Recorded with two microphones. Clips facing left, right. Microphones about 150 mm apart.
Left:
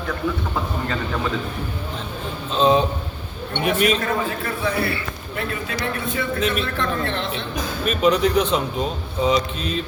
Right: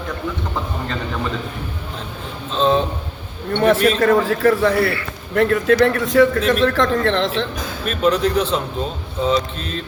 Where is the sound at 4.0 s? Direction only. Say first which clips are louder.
Right 9 dB; 85° right.